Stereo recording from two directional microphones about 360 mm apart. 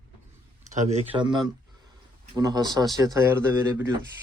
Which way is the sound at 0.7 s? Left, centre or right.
Centre.